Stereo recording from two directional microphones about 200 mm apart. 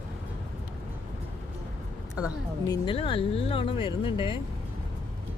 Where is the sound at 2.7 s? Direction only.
25° left (ahead or behind).